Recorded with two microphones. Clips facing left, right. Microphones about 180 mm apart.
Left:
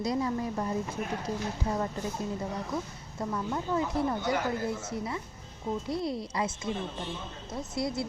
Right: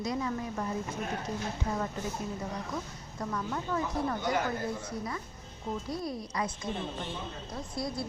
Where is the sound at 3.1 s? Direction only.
25° left (ahead or behind).